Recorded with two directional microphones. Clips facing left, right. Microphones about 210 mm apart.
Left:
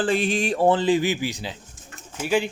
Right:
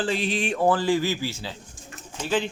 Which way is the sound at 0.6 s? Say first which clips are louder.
Left 2 dB; 20° left (ahead or behind).